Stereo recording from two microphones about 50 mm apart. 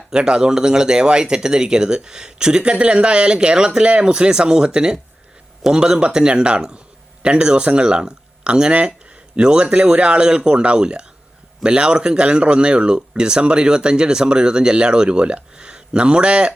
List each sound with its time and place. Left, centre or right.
0.1 s a man's voice: centre